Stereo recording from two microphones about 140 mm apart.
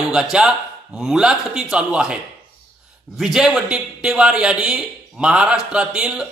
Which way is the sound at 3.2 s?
5° right (ahead or behind).